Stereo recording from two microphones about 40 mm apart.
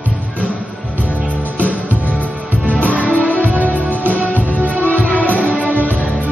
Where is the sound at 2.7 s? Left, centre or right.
Left.